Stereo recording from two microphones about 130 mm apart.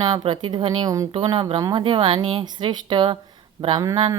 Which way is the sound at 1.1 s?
40° right (ahead or behind).